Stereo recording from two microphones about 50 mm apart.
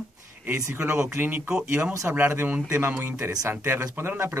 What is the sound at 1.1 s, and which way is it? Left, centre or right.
Speech, right.